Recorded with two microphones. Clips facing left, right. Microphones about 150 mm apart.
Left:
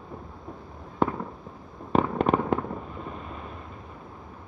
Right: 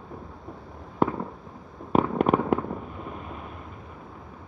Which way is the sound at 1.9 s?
10° right (ahead or behind).